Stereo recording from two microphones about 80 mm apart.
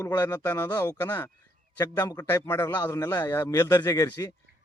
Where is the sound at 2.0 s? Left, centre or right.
Left.